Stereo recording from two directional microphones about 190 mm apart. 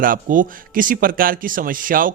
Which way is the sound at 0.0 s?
45° right (ahead or behind).